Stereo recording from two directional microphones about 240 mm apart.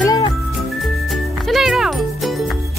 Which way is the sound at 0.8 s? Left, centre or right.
Centre.